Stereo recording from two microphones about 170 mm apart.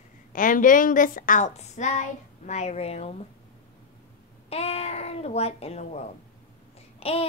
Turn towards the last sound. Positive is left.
turn(degrees=35)  # may be behind; listen again after turning